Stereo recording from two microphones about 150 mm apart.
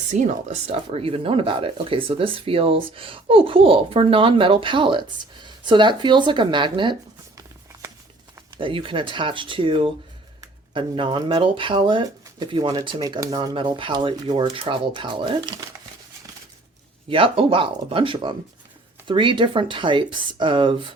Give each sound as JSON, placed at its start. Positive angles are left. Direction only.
{"t": 0.1, "sound": "speech", "side_deg": -60}
{"t": 0.7, "sound": "speech", "side_deg": -40}
{"t": 8.5, "sound": "speech", "side_deg": -35}
{"t": 17.1, "sound": "speech", "side_deg": -35}